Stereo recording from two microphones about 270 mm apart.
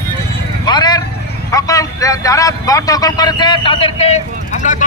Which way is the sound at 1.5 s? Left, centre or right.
Centre.